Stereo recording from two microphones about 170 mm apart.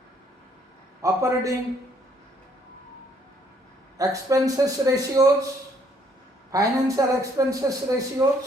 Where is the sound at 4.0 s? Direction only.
20° right (ahead or behind).